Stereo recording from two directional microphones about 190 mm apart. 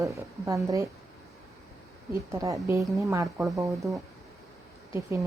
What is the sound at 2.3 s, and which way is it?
A woman's voice, 15° right (ahead or behind).